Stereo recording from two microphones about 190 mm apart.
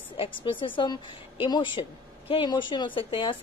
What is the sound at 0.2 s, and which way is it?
A woman's voice, 25° left (ahead or behind).